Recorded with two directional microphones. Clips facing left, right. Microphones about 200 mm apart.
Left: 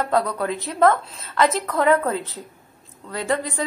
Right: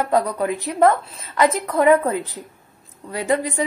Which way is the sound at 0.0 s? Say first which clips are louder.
Right 2 dB; 10° right (ahead or behind).